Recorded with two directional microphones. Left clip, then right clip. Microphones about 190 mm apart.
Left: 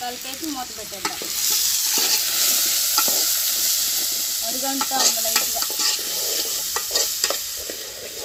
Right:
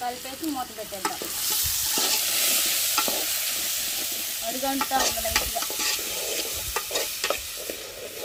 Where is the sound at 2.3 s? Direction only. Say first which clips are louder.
Left 4 dB; 35° right (ahead or behind).